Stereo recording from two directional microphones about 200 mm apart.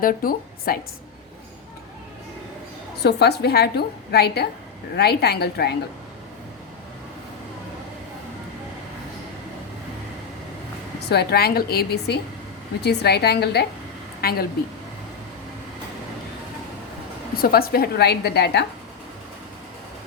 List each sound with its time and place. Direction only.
0.0 s a woman's voice: 45° left (ahead or behind)
3.0 s a woman's voice: 55° left (ahead or behind)
11.1 s a woman's voice: 55° left (ahead or behind)
17.3 s a woman's voice: 50° left (ahead or behind)